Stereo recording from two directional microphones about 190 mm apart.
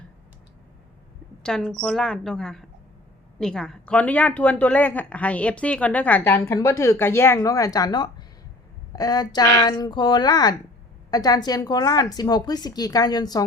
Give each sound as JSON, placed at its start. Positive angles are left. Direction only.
{"t": 1.4, "sound": "a woman's voice", "side_deg": 5}